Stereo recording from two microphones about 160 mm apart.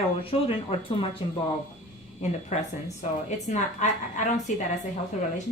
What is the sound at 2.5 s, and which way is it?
A woman's voice, 45° left (ahead or behind).